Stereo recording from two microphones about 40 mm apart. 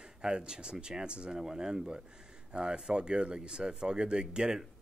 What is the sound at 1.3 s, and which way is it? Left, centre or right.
Speech, centre.